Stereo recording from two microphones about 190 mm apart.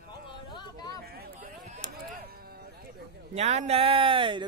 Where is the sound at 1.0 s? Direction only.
55° right (ahead or behind).